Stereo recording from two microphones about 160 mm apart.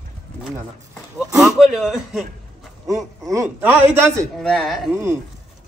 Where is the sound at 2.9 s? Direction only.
20° right (ahead or behind).